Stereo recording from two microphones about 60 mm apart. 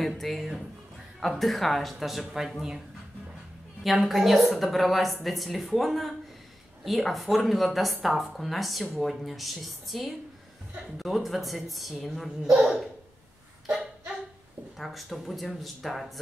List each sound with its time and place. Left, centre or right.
0.2 s speech: centre
3.8 s a child's voice: centre
14.8 s speech: centre